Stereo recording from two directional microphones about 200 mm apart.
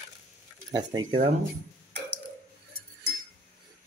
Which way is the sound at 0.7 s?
20° right (ahead or behind).